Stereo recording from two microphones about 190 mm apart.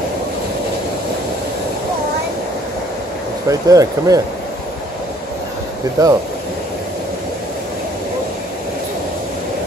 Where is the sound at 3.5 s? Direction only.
20° right (ahead or behind).